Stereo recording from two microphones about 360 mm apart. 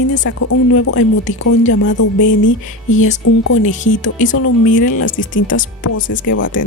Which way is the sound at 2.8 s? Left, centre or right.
Centre.